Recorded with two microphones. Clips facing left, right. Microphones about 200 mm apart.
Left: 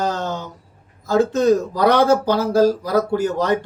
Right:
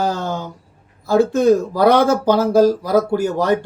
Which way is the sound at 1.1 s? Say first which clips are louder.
Right 2 dB; 10° right (ahead or behind).